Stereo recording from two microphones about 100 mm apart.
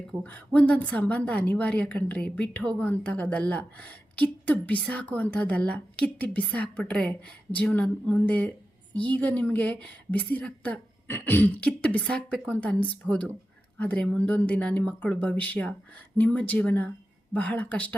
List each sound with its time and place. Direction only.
0.2 s a woman's voice: 15° left (ahead or behind)